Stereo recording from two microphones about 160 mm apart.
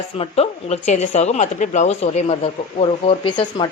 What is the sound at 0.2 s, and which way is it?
Speech, 40° left (ahead or behind).